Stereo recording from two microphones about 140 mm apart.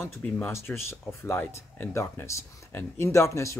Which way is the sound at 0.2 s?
15° left (ahead or behind).